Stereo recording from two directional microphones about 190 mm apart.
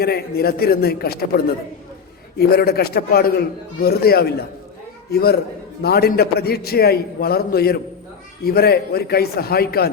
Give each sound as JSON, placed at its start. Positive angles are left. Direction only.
{"t": 0.0, "sound": "a man's voice", "side_deg": 55}
{"t": 2.4, "sound": "a man's voice", "side_deg": 55}